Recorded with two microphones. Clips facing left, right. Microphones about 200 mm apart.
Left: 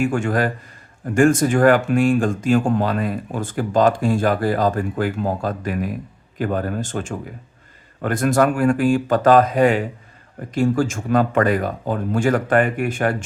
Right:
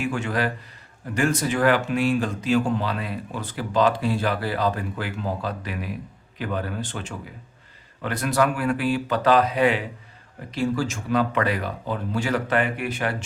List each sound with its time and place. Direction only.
0.0 s speech: 50° left (ahead or behind)